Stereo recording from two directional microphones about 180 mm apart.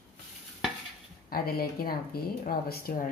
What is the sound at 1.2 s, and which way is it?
Speech, 55° left (ahead or behind).